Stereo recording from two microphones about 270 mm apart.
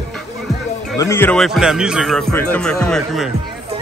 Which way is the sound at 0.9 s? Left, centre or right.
Centre.